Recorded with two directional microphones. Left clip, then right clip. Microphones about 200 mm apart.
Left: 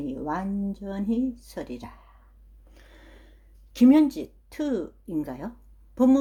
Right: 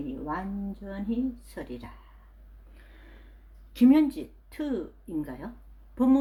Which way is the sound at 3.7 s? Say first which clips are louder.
Left 3 dB; 30° left (ahead or behind).